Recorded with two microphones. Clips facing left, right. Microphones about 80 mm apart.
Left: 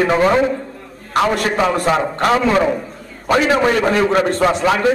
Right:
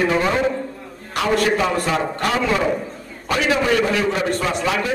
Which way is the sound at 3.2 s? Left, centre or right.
Left.